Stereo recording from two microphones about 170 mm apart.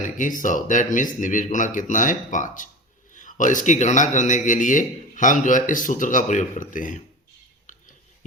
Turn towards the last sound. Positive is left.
turn(degrees=50)  # may be behind; listen again after turning